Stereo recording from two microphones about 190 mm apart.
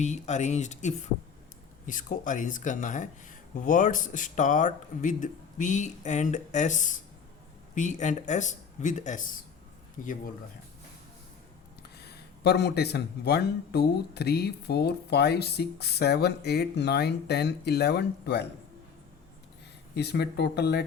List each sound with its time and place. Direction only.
0.0 s speech: 40° left (ahead or behind)
11.8 s speech: 60° left (ahead or behind)
20.0 s speech: 60° left (ahead or behind)